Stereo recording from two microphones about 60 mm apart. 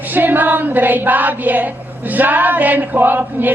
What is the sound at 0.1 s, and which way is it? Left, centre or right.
Female singing, right.